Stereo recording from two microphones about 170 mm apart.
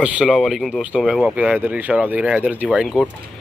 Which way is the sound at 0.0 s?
5° right (ahead or behind).